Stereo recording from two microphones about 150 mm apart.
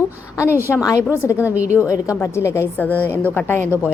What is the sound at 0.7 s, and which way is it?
Speech, 20° left (ahead or behind).